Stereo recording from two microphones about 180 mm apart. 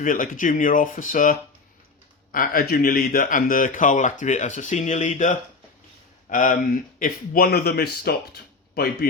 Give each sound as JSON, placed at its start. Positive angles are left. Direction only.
{"t": 0.0, "sound": "speech", "side_deg": 45}